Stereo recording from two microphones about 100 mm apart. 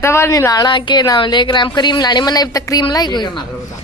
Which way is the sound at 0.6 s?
50° left (ahead or behind).